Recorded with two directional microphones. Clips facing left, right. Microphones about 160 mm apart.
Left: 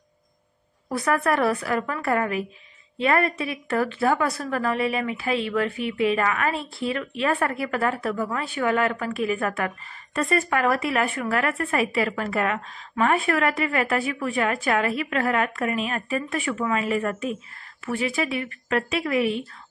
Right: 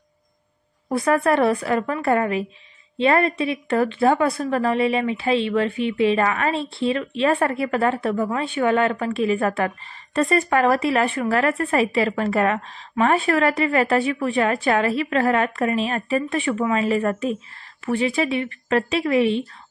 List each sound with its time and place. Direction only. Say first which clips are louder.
0.8 s speech: right 4 dB; 25° right (ahead or behind)